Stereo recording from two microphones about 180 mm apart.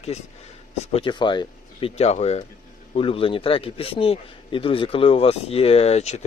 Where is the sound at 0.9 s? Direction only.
25° left (ahead or behind).